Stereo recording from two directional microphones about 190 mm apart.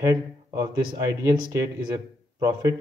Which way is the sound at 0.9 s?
15° right (ahead or behind).